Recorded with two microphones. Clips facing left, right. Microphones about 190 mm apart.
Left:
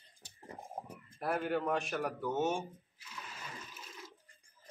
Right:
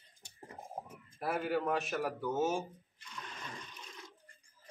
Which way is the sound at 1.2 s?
Centre (ahead or behind).